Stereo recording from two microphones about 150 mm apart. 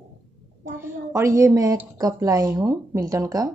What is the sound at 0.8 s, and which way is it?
A woman's voice, 20° right (ahead or behind).